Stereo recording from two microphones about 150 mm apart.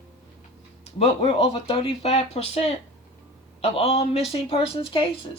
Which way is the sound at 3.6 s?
45° left (ahead or behind).